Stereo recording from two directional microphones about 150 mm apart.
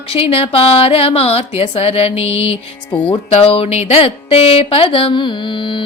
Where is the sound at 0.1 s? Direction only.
40° left (ahead or behind).